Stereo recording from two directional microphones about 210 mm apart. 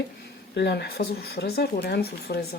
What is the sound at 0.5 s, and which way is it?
Speech, 50° left (ahead or behind).